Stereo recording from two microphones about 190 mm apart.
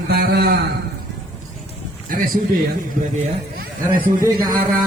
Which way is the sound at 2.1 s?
45° right (ahead or behind).